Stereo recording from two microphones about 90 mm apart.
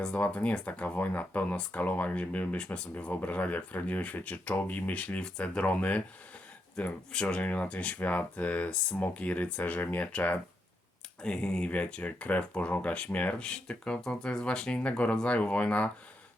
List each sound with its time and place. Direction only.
0.0 s speech: 15° left (ahead or behind)